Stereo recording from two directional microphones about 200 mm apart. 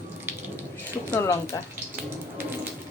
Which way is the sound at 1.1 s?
15° left (ahead or behind).